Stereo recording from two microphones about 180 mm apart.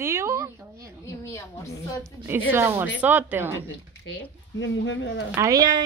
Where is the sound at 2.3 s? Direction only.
15° right (ahead or behind).